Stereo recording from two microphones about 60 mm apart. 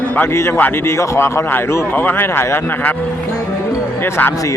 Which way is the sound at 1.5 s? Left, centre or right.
Left.